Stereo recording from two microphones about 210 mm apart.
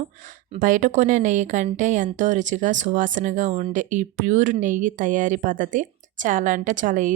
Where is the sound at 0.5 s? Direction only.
35° right (ahead or behind).